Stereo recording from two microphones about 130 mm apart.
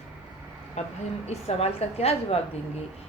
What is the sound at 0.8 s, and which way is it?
A woman's voice, 60° left (ahead or behind).